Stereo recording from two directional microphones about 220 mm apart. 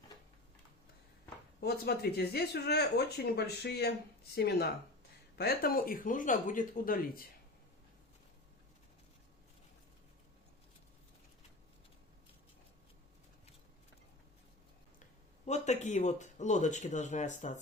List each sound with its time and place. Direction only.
1.6 s speech: 45° left (ahead or behind)
15.4 s speech: 30° left (ahead or behind)